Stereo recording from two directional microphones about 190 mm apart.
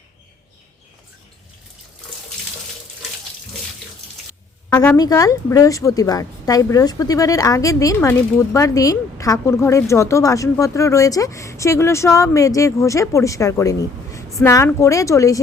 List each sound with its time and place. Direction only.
4.9 s a woman's voice: 20° left (ahead or behind)